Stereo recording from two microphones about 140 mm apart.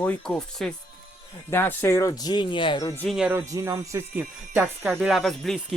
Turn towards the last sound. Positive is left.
turn(degrees=0)  # may be behind; listen again after turning